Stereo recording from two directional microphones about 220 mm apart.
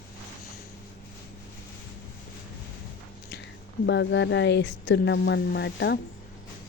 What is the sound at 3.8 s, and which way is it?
A woman's voice, 55° left (ahead or behind).